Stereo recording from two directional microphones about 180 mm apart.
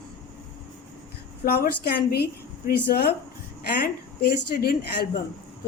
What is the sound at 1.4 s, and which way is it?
A woman's voice, 55° left (ahead or behind).